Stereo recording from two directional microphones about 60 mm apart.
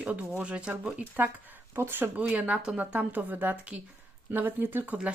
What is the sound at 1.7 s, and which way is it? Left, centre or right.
Speech, right.